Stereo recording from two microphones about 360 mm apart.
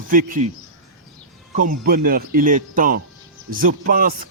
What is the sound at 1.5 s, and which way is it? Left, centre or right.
Speech, right.